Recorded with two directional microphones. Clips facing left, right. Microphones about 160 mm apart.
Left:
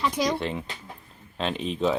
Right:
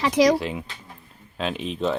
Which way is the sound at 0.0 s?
85° right.